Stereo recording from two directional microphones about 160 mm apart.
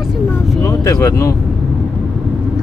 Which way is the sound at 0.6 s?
20° left (ahead or behind).